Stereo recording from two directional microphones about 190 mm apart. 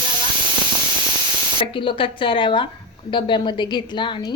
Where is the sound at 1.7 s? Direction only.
25° left (ahead or behind).